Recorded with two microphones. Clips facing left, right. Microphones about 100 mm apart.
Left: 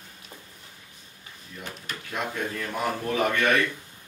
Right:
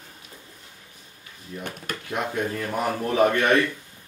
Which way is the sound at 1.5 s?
25° right (ahead or behind).